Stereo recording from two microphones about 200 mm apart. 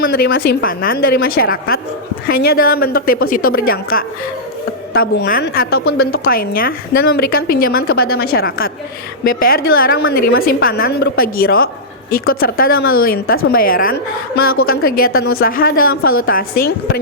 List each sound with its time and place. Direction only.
0.0 s a woman's voice: 50° left (ahead or behind)
4.9 s a woman's voice: 50° left (ahead or behind)